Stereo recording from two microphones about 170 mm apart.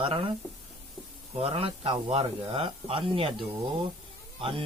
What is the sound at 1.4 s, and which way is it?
Speech, 35° right (ahead or behind).